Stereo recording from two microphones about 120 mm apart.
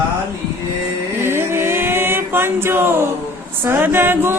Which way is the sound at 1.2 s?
20° right (ahead or behind).